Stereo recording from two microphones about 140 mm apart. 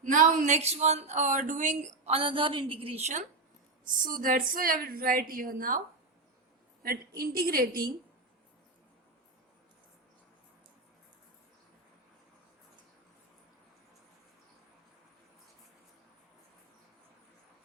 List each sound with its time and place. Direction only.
0.0 s speech: 65° right (ahead or behind)
3.8 s a woman's voice: 80° right
7.2 s a woman's voice: 90° right